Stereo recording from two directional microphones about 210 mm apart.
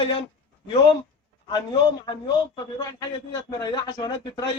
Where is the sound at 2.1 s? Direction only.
20° left (ahead or behind).